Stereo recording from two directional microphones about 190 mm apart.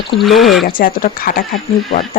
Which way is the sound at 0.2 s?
Centre (ahead or behind).